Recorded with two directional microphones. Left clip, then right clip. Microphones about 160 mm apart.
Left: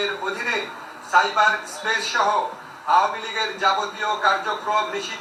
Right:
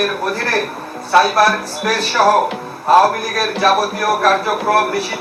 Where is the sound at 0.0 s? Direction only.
35° right (ahead or behind).